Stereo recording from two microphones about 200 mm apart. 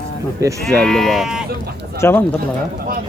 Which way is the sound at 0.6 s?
5° left (ahead or behind).